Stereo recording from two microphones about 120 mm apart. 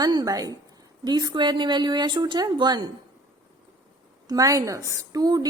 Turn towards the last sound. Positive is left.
turn(degrees=-35)  # may be behind; listen again after turning